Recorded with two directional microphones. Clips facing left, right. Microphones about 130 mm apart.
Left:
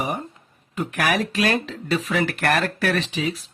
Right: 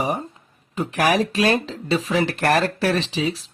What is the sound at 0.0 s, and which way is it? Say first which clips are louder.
Speech: right 3 dB; 35° right (ahead or behind).